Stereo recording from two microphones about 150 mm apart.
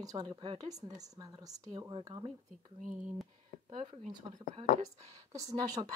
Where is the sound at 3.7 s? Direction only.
35° right (ahead or behind).